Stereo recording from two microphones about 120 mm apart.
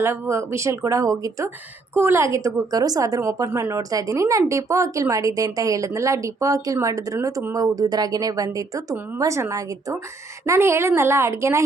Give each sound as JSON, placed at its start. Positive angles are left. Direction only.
{"t": 0.0, "sound": "speech", "side_deg": -20}